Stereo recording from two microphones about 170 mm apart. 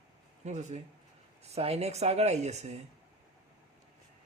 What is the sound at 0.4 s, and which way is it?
Speech, 40° right (ahead or behind).